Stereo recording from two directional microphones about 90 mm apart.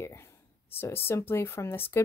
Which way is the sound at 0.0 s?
30° left (ahead or behind).